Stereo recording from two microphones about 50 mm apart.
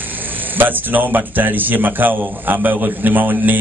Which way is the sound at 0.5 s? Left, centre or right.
Right.